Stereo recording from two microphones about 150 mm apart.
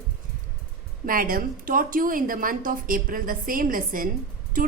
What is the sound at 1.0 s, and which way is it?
A woman's voice, 70° right (ahead or behind).